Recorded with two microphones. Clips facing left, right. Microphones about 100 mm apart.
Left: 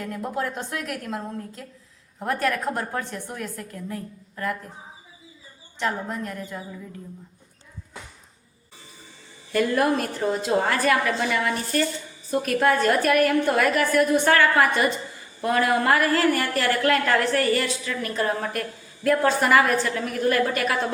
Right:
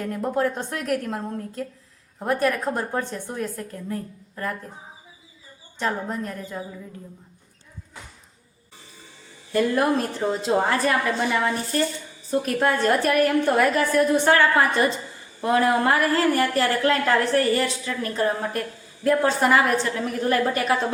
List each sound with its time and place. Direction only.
0.1 s a woman's voice: 35° right (ahead or behind)
2.2 s a woman's voice: 20° right (ahead or behind); by 4.5 s 35° right (ahead or behind)
5.8 s a woman's voice: 35° right (ahead or behind)
9.5 s a woman's voice: 20° right (ahead or behind)